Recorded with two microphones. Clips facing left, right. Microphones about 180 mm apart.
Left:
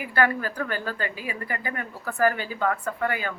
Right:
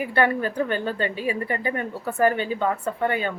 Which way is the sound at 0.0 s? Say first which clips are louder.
Right 3 dB; 25° right (ahead or behind).